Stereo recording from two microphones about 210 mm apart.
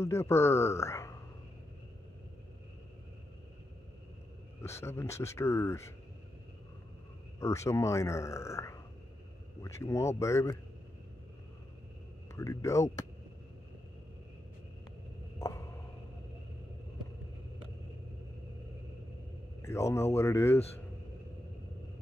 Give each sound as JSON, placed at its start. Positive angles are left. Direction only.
{"t": 0.0, "sound": "speech", "side_deg": 15}
{"t": 4.6, "sound": "speech", "side_deg": 10}
{"t": 7.3, "sound": "speech", "side_deg": 15}
{"t": 12.4, "sound": "speech", "side_deg": 15}
{"t": 15.3, "sound": "a sound", "side_deg": 15}
{"t": 19.6, "sound": "speech", "side_deg": 15}